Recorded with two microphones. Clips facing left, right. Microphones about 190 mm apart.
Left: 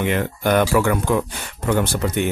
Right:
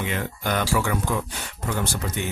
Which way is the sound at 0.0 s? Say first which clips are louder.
Left 7 dB; 60° left (ahead or behind).